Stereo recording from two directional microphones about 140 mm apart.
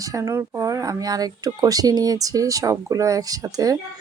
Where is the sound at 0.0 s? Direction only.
25° right (ahead or behind).